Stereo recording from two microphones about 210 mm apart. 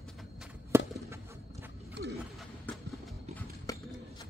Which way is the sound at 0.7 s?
10° right (ahead or behind).